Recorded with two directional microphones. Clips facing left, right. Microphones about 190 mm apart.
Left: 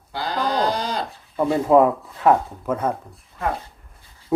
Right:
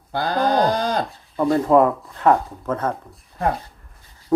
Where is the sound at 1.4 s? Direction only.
10° left (ahead or behind).